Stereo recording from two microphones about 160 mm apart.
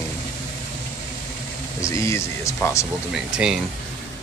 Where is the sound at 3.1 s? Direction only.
5° right (ahead or behind).